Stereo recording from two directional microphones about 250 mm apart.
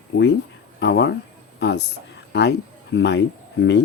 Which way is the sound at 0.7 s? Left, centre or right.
Left.